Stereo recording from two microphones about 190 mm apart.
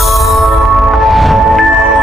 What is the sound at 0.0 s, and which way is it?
Music, centre (ahead or behind).